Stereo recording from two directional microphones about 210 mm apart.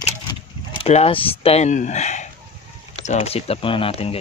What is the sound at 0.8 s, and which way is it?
Speech, 25° left (ahead or behind).